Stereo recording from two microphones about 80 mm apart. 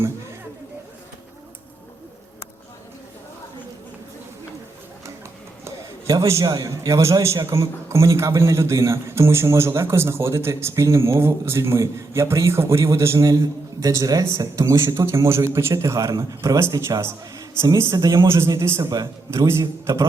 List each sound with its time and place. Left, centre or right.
6.1 s a man's voice: right
17.9 s a man's voice: right
18.2 s a man's voice: right
19.5 s a man's voice: right